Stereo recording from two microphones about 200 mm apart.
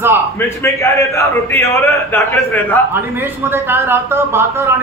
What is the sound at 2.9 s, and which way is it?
A man's voice, 10° right (ahead or behind).